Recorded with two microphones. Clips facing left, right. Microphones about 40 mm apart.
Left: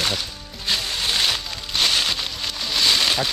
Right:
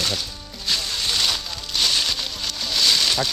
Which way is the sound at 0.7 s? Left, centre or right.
Left.